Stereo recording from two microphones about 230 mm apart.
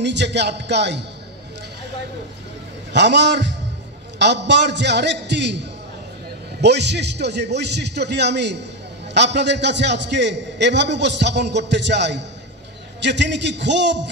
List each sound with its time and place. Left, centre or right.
0.0 s a man's voice: right
2.9 s a man's voice: right